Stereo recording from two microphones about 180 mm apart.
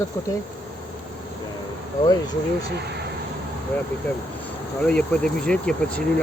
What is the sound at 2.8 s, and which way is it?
Speech, 65° right (ahead or behind).